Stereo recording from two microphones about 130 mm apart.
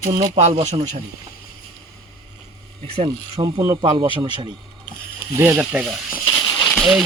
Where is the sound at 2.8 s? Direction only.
50° right (ahead or behind).